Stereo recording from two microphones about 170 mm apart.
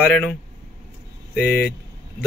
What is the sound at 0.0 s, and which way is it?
Speech, 5° left (ahead or behind).